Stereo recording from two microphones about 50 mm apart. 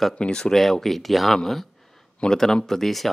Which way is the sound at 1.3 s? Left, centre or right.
Centre.